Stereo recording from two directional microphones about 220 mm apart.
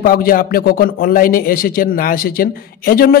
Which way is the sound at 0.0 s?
40° left (ahead or behind).